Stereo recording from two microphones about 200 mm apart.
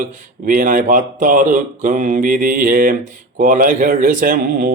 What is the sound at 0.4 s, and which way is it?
Speech, 40° right (ahead or behind).